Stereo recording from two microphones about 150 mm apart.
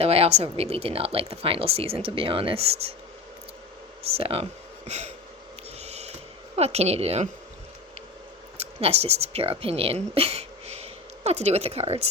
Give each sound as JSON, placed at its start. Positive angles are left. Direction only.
{"t": 0.0, "sound": "speech", "side_deg": -40}
{"t": 4.2, "sound": "speech", "side_deg": -40}
{"t": 5.8, "sound": "a sound", "side_deg": -45}
{"t": 6.6, "sound": "speech", "side_deg": -45}
{"t": 8.5, "sound": "speech", "side_deg": -45}